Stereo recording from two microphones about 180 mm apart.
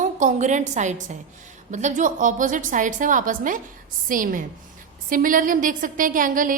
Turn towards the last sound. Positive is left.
turn(degrees=-50)  # may be behind; listen again after turning